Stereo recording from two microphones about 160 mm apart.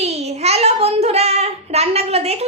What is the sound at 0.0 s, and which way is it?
A child's voice, 40° right (ahead or behind).